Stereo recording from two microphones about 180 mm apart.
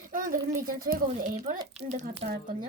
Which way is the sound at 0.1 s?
50° right (ahead or behind).